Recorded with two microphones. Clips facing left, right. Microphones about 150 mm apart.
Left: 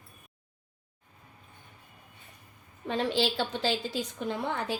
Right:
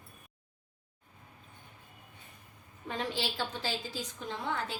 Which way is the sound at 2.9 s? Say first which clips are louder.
Left 7 dB; 75° left (ahead or behind).